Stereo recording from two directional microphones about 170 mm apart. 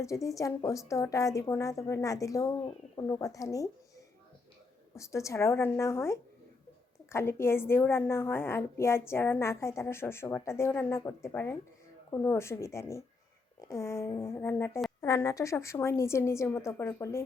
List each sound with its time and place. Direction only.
0.0 s a woman's voice: 20° left (ahead or behind)